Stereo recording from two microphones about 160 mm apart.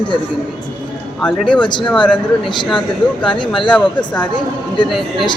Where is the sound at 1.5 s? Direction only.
30° left (ahead or behind).